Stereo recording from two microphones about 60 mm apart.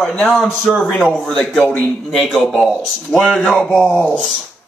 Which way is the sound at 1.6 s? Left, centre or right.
Left.